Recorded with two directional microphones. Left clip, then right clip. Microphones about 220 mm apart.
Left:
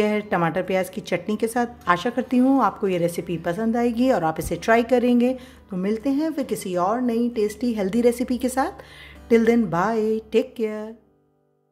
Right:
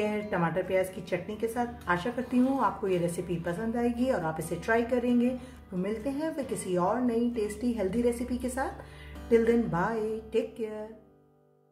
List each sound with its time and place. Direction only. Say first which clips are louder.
0.0 s a woman's voice: left 8 dB; 40° left (ahead or behind)